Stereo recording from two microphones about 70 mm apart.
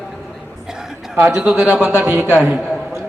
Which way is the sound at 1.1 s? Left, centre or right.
Right.